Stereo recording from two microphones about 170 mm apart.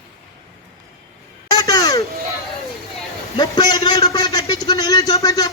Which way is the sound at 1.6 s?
20° left (ahead or behind).